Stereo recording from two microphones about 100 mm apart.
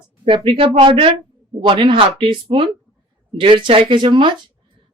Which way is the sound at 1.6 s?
55° right (ahead or behind).